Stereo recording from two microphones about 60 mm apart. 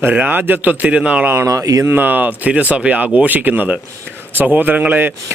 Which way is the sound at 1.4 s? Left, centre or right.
Right.